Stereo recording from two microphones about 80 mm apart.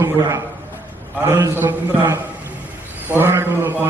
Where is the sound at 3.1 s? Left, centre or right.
Right.